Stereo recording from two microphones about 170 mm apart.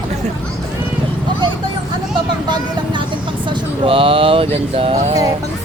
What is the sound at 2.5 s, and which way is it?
Vehicle, 25° right (ahead or behind).